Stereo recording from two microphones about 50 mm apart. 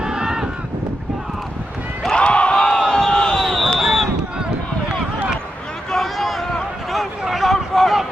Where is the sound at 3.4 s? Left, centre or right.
Centre.